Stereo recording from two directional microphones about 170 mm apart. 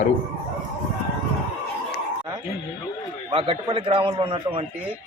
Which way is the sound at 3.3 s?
30° right (ahead or behind).